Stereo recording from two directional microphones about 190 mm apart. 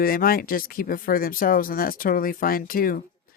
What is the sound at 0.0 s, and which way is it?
Speech, 50° left (ahead or behind).